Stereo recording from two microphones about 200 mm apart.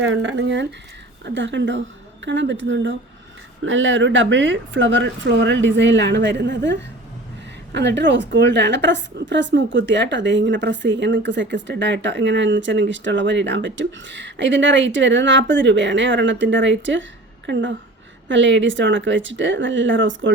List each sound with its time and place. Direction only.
0.0 s a woman's voice: 65° right (ahead or behind)